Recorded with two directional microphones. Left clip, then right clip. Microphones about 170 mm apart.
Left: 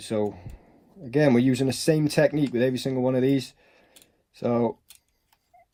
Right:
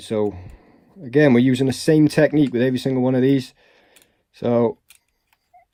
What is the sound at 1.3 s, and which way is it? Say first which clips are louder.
Speech: right 5 dB; 45° right (ahead or behind).